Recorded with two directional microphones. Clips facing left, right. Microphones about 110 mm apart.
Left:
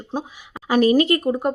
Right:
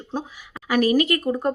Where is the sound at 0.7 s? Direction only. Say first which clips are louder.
Left 3 dB; 30° left (ahead or behind).